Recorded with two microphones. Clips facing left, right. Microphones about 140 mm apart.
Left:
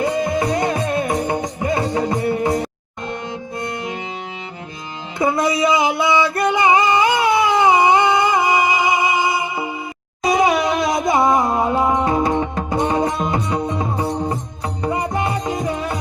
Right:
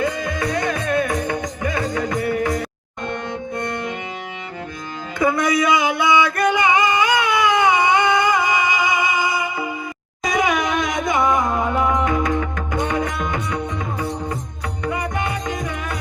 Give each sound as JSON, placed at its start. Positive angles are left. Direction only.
{"t": 0.0, "sound": "music", "side_deg": 30}
{"t": 5.2, "sound": "a sound", "side_deg": 30}
{"t": 10.2, "sound": "music", "side_deg": 35}